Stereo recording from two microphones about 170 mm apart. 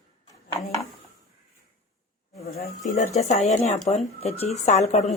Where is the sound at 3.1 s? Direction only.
40° left (ahead or behind).